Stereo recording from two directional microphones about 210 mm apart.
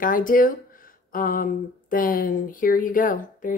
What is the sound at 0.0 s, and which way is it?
A woman's voice, 40° left (ahead or behind).